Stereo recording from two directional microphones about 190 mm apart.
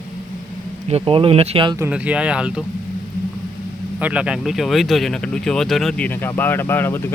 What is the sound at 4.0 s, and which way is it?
Speech, 5° right (ahead or behind).